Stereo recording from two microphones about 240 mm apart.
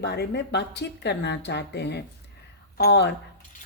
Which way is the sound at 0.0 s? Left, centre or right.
Left.